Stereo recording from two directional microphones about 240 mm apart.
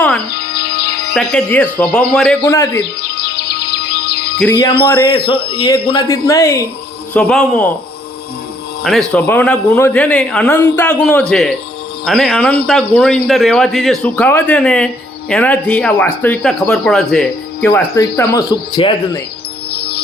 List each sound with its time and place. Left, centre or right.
0.3 s music: left
1.1 s speech: centre
3.3 s music: left
4.5 s a man's voice: centre
8.8 s speech: centre
18.3 s speech: centre
19.7 s music: left